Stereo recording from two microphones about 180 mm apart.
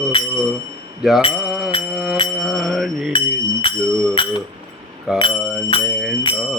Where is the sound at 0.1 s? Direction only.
30° left (ahead or behind).